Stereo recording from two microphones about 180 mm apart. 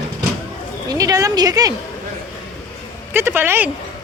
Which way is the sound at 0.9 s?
20° right (ahead or behind).